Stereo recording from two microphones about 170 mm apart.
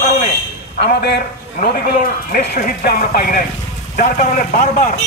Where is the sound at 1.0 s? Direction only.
65° left (ahead or behind).